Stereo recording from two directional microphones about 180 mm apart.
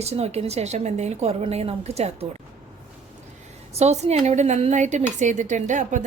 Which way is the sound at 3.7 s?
35° right (ahead or behind).